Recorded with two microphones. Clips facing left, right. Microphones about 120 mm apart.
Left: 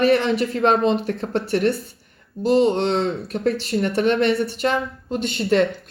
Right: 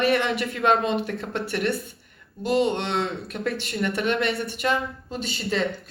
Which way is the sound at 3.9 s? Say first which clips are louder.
Left 7 dB; 45° left (ahead or behind).